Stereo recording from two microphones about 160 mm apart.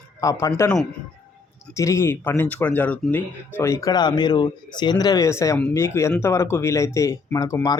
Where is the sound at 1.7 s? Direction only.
20° left (ahead or behind).